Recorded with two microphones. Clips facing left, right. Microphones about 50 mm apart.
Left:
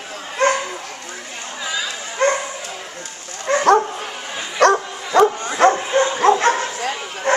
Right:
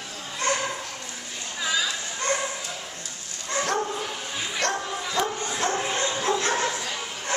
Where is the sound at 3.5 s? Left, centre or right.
Left.